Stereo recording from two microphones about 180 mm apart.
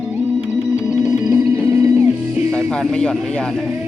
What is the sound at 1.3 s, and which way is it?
Music, 10° right (ahead or behind).